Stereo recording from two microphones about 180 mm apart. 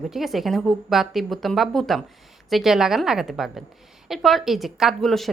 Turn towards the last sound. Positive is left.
turn(degrees=0)  # may be behind; listen again after turning